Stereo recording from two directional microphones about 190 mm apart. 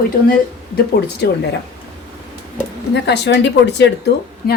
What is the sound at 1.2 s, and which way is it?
Speech, 55° left (ahead or behind).